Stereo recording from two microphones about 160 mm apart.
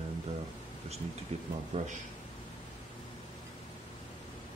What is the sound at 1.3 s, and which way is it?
Speech, 40° right (ahead or behind).